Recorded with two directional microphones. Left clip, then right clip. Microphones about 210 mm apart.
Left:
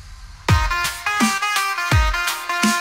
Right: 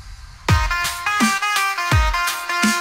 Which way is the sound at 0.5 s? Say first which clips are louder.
Even; centre (ahead or behind).